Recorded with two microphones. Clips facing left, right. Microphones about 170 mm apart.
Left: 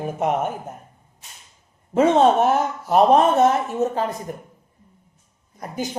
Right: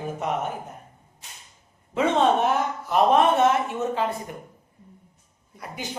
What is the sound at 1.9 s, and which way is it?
Speech, 40° left (ahead or behind).